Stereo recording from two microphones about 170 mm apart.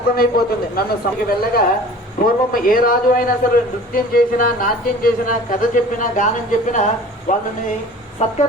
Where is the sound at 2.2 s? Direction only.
55° left (ahead or behind).